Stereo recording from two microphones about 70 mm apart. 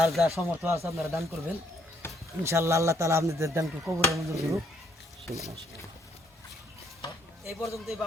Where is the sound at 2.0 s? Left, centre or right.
Left.